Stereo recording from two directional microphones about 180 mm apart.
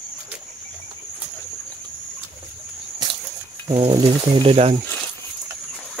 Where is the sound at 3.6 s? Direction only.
30° right (ahead or behind).